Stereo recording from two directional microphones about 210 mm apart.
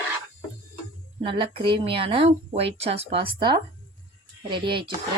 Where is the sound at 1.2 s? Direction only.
25° right (ahead or behind).